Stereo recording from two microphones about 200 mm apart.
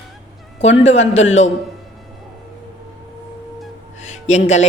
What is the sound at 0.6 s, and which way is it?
Speech, 30° left (ahead or behind).